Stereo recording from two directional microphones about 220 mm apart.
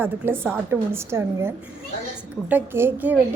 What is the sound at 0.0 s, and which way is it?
A woman's voice, 10° right (ahead or behind).